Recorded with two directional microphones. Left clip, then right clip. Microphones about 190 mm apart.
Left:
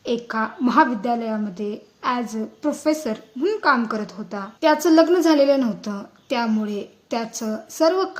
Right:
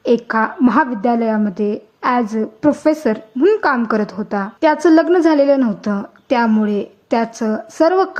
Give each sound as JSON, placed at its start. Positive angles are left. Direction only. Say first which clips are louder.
{"t": 0.0, "sound": "a woman's voice", "louder": "right 9 dB", "side_deg": -45}